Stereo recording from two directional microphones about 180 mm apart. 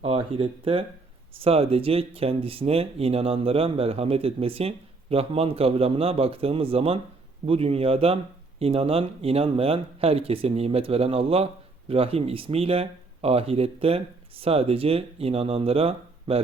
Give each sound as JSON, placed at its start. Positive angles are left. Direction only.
{"t": 0.0, "sound": "speech", "side_deg": -30}